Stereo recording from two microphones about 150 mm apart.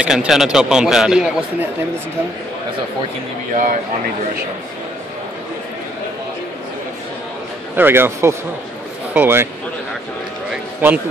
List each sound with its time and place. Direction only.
0.0 s a man's voice: 5° right (ahead or behind)
3.5 s speech: 60° right (ahead or behind)
7.7 s speech: 15° right (ahead or behind)
10.5 s a sound: 15° right (ahead or behind)